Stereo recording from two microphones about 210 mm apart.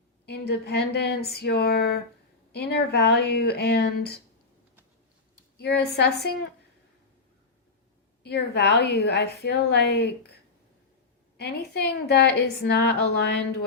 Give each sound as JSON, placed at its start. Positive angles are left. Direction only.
{"t": 0.3, "sound": "a woman's voice", "side_deg": 50}
{"t": 5.6, "sound": "a woman's voice", "side_deg": 50}
{"t": 8.2, "sound": "a woman's voice", "side_deg": 50}